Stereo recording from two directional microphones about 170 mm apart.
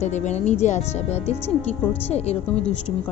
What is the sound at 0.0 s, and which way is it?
Speech, 45° left (ahead or behind).